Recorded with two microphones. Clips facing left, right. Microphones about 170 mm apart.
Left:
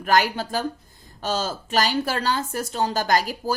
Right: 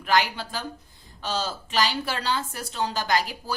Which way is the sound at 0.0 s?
45° left (ahead or behind).